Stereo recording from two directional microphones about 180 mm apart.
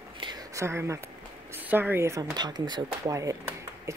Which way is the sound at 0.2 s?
20° right (ahead or behind).